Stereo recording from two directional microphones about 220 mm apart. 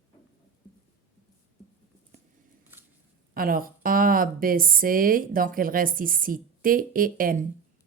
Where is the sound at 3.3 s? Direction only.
40° right (ahead or behind).